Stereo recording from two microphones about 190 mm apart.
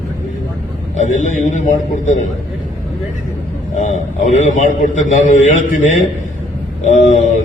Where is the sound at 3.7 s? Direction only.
40° left (ahead or behind).